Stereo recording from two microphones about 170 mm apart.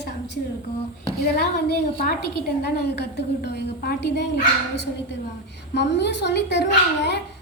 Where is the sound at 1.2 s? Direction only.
70° left (ahead or behind).